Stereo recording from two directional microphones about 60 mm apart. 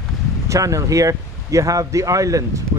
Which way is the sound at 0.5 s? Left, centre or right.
Right.